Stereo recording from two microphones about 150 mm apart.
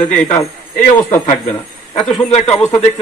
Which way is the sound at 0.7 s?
60° left (ahead or behind).